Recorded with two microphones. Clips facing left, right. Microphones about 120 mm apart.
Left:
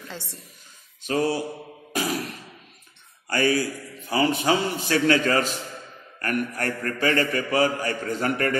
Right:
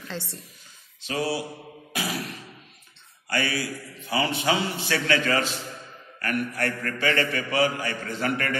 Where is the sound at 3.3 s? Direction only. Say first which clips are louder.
Left 5 dB; 40° left (ahead or behind).